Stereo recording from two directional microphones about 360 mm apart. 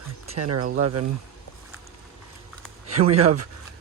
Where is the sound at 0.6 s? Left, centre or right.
Right.